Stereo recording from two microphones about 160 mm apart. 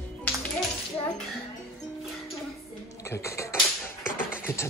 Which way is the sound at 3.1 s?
20° left (ahead or behind).